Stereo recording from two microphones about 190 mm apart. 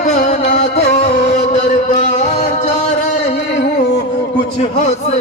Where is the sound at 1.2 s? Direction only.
40° left (ahead or behind).